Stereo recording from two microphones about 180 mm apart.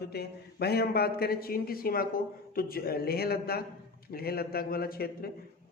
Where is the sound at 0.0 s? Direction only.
65° left (ahead or behind).